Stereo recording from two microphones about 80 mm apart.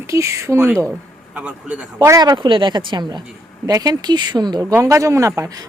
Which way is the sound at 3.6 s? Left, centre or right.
Right.